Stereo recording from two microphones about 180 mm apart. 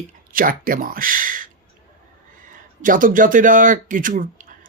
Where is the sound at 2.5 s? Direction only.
50° right (ahead or behind).